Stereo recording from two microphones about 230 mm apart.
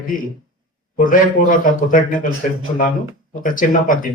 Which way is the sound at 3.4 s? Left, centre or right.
Left.